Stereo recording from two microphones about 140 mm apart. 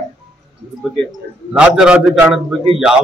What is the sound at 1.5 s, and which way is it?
A man's voice, 5° right (ahead or behind).